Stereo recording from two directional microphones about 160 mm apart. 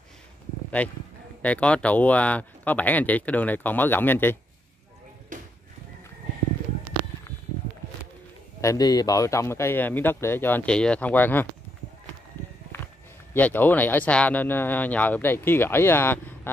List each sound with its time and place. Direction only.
0.8 s speech: 10° left (ahead or behind)
5.3 s a sound: 55° right (ahead or behind)
8.5 s speech: 20° left (ahead or behind)
12.4 s walk: 10° left (ahead or behind)
12.8 s speech: 10° left (ahead or behind)